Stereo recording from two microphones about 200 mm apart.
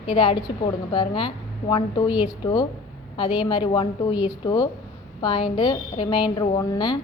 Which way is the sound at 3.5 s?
25° left (ahead or behind).